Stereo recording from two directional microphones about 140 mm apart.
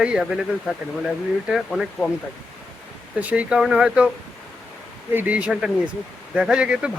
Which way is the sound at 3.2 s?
10° right (ahead or behind).